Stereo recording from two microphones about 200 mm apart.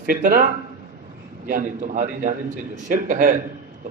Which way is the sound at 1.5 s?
45° right (ahead or behind).